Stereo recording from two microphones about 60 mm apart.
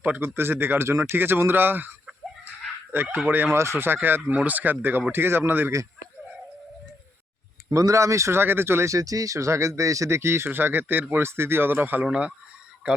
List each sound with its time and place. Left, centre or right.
0.2 s speech: right
2.9 s speech: right
3.5 s speech: right
7.7 s speech: right
8.4 s speech: right
8.9 s speech: right
12.0 s speech: centre